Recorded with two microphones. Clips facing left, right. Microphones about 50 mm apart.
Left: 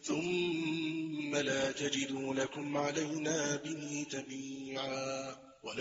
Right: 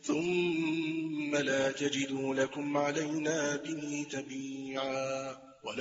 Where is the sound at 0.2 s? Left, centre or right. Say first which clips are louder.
Right 3 dB; right.